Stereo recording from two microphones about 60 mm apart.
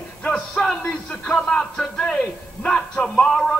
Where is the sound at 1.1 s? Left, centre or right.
Centre.